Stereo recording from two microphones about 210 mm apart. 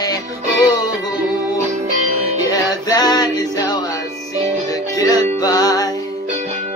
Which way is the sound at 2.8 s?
20° left (ahead or behind).